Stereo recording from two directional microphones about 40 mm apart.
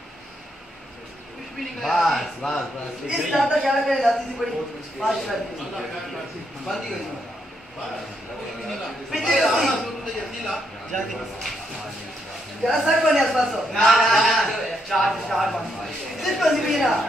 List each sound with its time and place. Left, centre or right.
1.6 s a man's voice: centre
2.4 s a man's voice: centre
3.1 s speech: centre
9.1 s speech: centre
10.9 s speech: centre
12.6 s speech: centre